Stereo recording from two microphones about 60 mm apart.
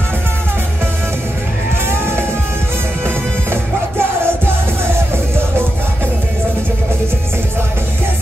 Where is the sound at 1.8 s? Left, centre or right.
Right.